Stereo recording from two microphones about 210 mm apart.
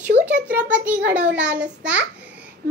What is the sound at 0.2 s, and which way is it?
A child's voice, 5° right (ahead or behind).